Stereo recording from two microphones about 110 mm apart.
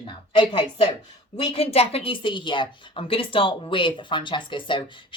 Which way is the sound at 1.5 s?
70° left (ahead or behind).